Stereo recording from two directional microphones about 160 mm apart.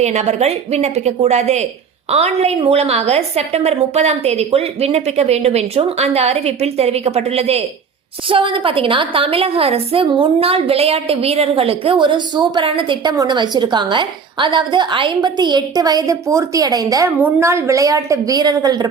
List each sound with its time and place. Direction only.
0.0 s a woman's voice: 45° right (ahead or behind); by 18.9 s 25° right (ahead or behind)